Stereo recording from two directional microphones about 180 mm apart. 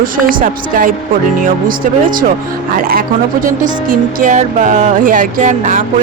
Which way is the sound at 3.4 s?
50° right (ahead or behind).